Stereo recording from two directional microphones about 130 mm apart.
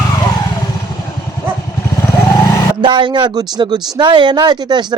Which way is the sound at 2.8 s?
35° right (ahead or behind).